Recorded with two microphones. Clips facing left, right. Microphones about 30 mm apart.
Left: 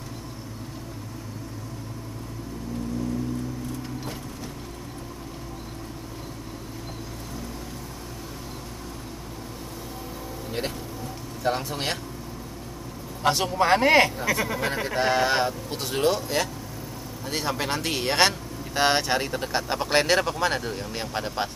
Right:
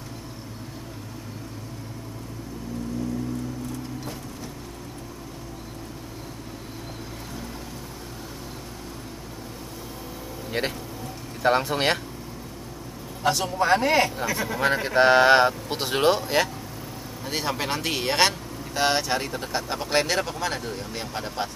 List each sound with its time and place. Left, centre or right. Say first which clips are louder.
11.4 s speech: right 6 dB; right
13.2 s a man's voice: left 1 dB; left
14.2 s speech: left 2 dB; centre
14.6 s speech: right 5 dB; right
17.2 s a man's voice: even; centre
18.7 s speech: left 1 dB; centre